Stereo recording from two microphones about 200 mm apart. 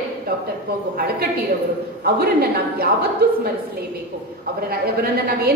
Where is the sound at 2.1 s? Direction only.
50° right (ahead or behind).